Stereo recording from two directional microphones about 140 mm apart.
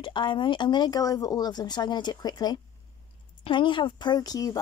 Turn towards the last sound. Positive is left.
turn(degrees=25)  # may be behind; listen again after turning